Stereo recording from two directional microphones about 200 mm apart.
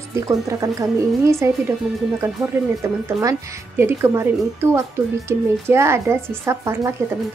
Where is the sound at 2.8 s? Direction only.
15° right (ahead or behind).